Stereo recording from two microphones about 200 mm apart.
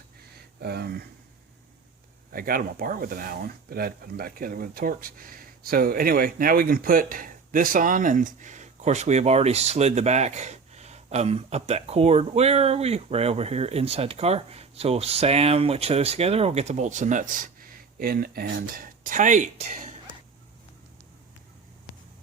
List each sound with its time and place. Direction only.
0.6 s speech: 50° right (ahead or behind)
2.3 s speech: 45° right (ahead or behind)